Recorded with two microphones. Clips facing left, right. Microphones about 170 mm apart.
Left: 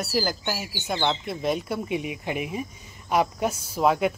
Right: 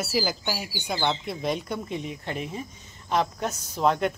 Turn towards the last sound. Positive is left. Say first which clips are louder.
# left 2 dB
turn(degrees=5)  # may be behind; listen again after turning